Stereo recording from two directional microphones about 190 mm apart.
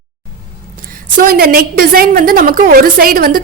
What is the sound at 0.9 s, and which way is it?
A woman's voice, 50° right (ahead or behind).